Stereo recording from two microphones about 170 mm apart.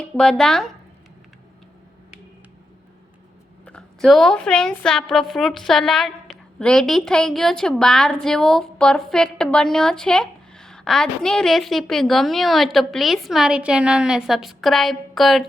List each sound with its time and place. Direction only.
0.0 s a woman's voice: 5° left (ahead or behind)
3.7 s a woman's voice: 5° left (ahead or behind)